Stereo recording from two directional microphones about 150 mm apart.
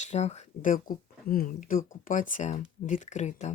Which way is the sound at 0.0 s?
50° left (ahead or behind).